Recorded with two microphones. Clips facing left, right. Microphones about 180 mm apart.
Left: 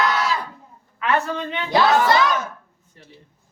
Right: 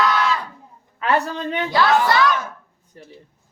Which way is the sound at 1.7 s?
20° left (ahead or behind).